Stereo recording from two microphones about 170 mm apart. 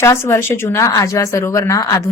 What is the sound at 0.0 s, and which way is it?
Speech, 15° left (ahead or behind).